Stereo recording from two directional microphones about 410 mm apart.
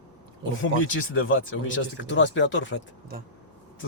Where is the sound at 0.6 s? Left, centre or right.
Left.